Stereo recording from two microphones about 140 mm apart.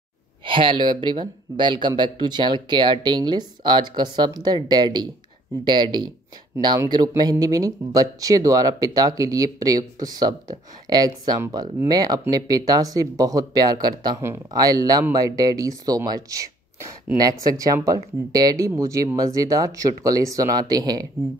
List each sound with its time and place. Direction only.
0.5 s speech: 35° right (ahead or behind)